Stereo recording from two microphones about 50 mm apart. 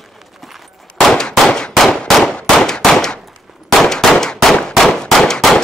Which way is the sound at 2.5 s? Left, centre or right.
Centre.